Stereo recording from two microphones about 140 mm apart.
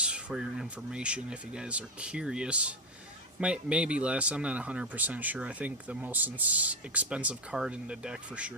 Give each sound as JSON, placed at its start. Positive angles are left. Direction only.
{"t": 0.0, "sound": "speech", "side_deg": -5}